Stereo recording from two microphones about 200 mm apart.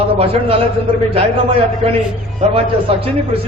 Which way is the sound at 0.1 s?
30° right (ahead or behind).